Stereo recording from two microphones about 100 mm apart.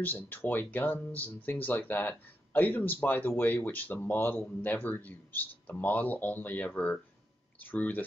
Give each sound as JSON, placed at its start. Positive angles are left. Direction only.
{"t": 0.0, "sound": "speech", "side_deg": 20}